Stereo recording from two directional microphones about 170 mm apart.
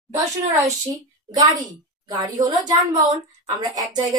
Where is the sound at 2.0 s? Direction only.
20° right (ahead or behind).